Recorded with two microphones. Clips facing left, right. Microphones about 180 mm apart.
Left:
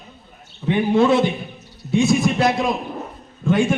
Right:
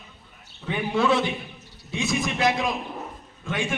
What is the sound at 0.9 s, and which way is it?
Speech, 45° left (ahead or behind).